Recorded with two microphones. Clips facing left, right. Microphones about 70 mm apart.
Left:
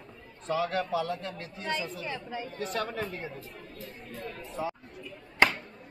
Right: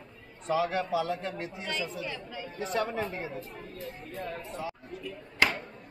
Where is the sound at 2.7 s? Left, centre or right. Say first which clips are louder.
Right 4 dB; centre.